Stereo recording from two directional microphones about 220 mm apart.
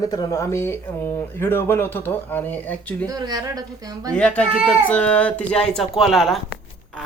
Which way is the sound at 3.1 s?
20° right (ahead or behind).